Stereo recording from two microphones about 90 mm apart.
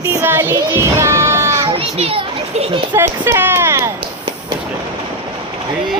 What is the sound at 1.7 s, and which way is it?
Children playing, 90° right.